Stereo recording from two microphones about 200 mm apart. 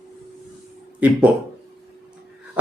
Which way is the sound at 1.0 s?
5° right (ahead or behind).